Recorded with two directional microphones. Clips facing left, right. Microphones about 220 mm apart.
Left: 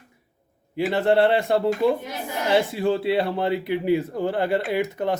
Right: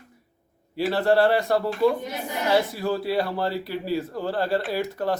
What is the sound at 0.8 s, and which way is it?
Speech, 20° left (ahead or behind).